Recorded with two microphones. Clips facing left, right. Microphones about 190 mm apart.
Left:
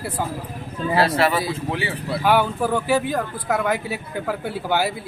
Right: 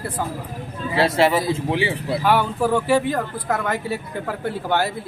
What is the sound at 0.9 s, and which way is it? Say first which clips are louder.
Speech: right 2 dB; 25° right (ahead or behind).